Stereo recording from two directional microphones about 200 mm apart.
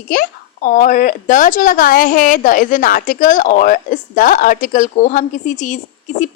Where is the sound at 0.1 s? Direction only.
40° left (ahead or behind).